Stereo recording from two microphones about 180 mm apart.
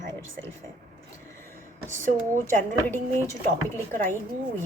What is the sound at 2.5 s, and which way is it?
A woman's voice, 10° left (ahead or behind).